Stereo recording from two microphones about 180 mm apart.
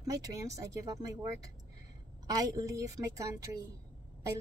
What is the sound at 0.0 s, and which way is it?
A woman's voice, 20° right (ahead or behind).